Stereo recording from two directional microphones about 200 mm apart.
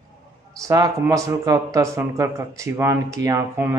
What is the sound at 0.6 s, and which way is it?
Speech, 15° right (ahead or behind).